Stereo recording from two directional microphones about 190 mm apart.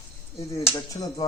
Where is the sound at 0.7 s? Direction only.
20° left (ahead or behind).